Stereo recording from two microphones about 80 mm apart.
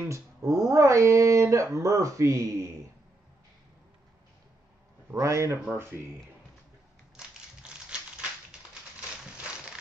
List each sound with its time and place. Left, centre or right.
0.0 s speech: right
5.1 s a man's voice: right
7.2 s crushing: centre
9.2 s a sound: centre